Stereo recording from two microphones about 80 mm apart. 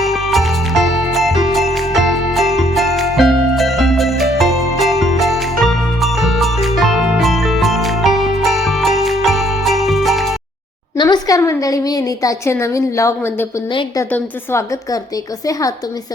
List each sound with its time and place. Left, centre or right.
0.0 s music: centre
10.9 s a sound: left
14.5 s a woman's voice: left